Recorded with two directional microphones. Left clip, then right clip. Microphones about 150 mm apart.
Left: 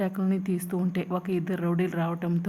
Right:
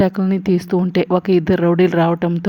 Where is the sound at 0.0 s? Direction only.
35° right (ahead or behind).